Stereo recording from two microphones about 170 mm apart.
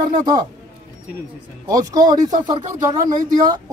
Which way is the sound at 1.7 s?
20° right (ahead or behind).